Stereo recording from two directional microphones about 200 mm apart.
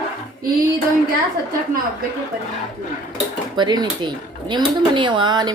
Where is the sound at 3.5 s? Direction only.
20° right (ahead or behind).